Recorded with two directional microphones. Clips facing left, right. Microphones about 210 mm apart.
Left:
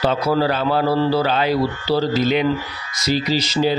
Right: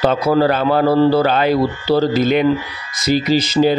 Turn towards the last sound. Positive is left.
turn(degrees=-50)  # may be behind; listen again after turning